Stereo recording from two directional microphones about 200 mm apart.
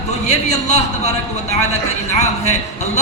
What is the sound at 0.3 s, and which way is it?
A man's voice, 35° left (ahead or behind).